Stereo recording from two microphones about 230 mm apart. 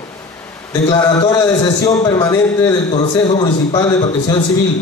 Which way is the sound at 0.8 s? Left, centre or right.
Centre.